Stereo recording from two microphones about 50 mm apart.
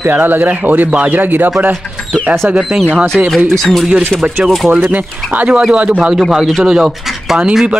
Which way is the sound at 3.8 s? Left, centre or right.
Right.